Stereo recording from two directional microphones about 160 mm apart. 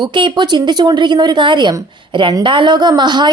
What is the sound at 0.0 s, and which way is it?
Speech, 30° right (ahead or behind).